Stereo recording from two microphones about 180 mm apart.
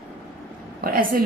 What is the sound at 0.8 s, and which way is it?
Speech, 55° right (ahead or behind).